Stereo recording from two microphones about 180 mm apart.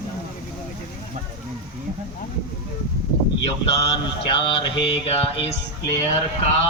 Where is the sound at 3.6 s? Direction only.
35° left (ahead or behind).